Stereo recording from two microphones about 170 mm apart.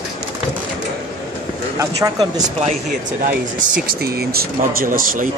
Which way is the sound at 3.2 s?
55° right (ahead or behind).